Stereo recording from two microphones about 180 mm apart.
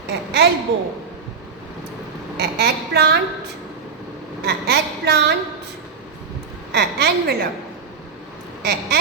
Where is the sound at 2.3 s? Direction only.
65° right (ahead or behind).